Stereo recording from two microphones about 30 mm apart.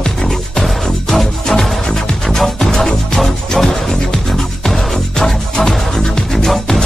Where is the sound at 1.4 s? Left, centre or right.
Centre.